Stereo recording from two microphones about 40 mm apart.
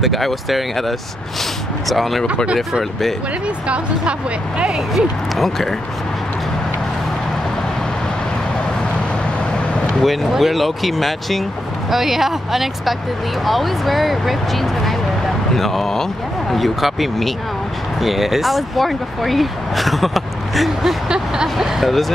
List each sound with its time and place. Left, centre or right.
0.0 s speech: centre
2.4 s speech: centre
3.6 s speech: right
4.9 s speech: centre
10.0 s speech: centre
11.9 s speech: centre